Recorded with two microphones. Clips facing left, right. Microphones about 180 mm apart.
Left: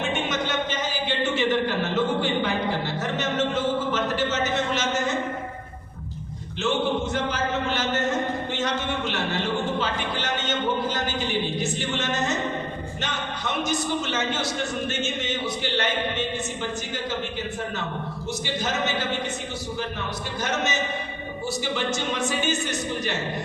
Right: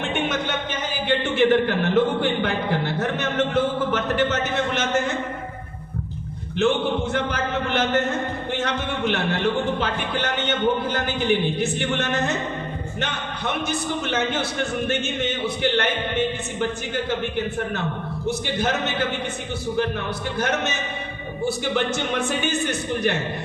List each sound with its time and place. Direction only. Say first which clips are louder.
0.0 s a man's voice: right 2 dB; 55° right (ahead or behind)
6.6 s a man's voice: right 3 dB; 55° right (ahead or behind)
20.4 s a man's voice: right 1 dB; 55° right (ahead or behind)